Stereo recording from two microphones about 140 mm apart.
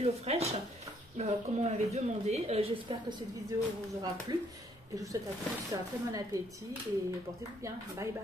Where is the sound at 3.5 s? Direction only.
20° right (ahead or behind).